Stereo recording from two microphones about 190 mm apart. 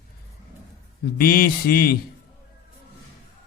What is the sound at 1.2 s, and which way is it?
Speech, 50° left (ahead or behind).